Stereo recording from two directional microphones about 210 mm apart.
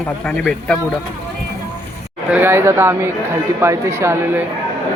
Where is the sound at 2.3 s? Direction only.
10° right (ahead or behind).